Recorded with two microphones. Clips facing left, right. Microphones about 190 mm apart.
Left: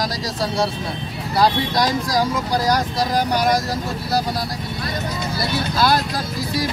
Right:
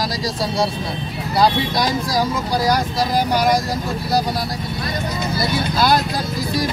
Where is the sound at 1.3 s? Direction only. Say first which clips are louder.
Right 1 dB; 10° right (ahead or behind).